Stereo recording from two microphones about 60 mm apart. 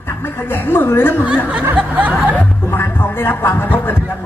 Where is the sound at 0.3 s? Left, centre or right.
Left.